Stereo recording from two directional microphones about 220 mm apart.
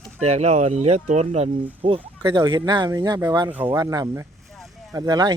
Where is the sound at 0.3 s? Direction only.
30° right (ahead or behind).